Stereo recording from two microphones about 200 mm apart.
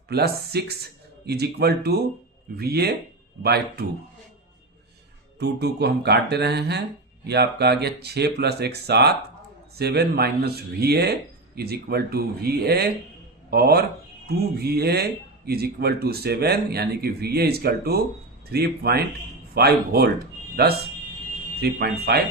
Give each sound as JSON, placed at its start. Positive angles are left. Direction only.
{"t": 0.1, "sound": "speech", "side_deg": -55}
{"t": 5.4, "sound": "speech", "side_deg": -55}